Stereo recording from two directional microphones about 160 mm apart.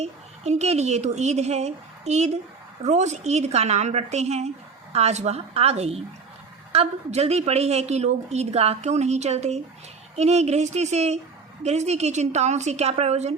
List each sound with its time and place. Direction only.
0.0 s a woman's voice: 45° right (ahead or behind)